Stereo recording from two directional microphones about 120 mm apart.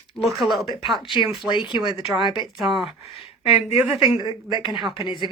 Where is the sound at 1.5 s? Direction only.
40° left (ahead or behind).